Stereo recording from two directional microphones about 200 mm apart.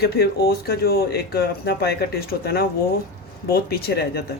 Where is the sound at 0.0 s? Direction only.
50° left (ahead or behind).